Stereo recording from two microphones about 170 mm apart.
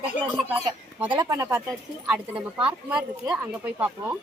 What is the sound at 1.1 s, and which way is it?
A woman's voice, 25° right (ahead or behind).